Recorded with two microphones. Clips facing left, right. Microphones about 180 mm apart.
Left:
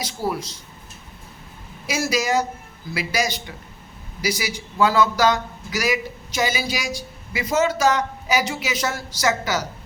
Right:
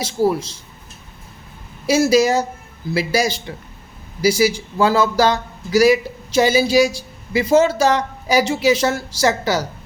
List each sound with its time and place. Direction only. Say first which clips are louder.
0.0 s speech: right 8 dB; 25° right (ahead or behind)
1.9 s a man's voice: right 8 dB; 30° right (ahead or behind)